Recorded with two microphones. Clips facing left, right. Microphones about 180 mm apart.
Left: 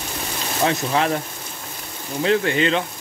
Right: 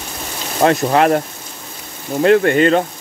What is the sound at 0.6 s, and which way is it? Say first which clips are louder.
Speech: right 7 dB; 60° right (ahead or behind).